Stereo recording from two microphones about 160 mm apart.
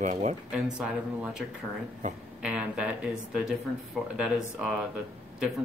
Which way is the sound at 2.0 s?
50° right (ahead or behind).